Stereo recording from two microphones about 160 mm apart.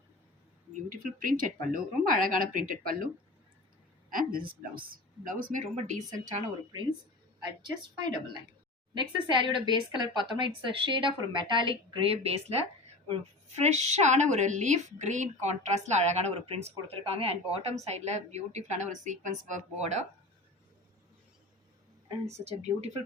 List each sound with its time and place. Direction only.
0.9 s speech: 60° right (ahead or behind)
4.1 s speech: 60° right (ahead or behind)
7.3 s a woman's voice: 25° right (ahead or behind); by 20.1 s 45° right (ahead or behind)